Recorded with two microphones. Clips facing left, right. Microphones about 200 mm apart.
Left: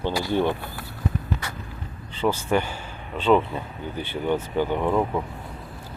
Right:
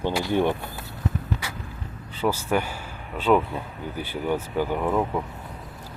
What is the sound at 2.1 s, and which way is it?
Speech, 10° right (ahead or behind).